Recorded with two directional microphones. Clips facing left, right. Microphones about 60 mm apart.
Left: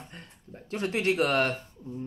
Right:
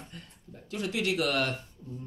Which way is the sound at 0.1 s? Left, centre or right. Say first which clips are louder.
Left 2 dB; left.